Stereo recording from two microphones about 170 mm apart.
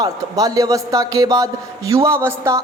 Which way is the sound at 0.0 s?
20° right (ahead or behind).